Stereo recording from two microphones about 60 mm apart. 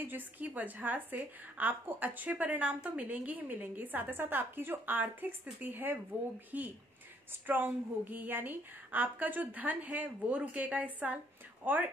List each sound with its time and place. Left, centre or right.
0.0 s a woman's voice: right